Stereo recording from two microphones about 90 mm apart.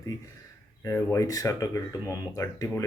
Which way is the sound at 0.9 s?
35° left (ahead or behind).